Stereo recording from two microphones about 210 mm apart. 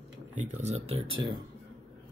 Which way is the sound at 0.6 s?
30° right (ahead or behind).